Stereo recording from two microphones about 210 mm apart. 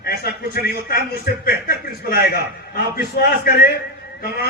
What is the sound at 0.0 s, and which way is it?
A man's voice, 50° left (ahead or behind).